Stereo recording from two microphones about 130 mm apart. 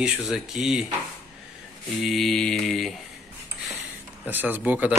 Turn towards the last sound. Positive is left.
turn(degrees=-10)  # may be behind; listen again after turning